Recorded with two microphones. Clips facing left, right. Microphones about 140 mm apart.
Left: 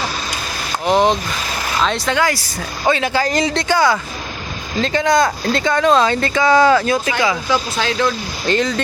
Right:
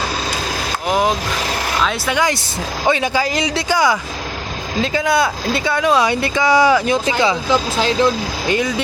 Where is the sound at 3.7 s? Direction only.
15° right (ahead or behind).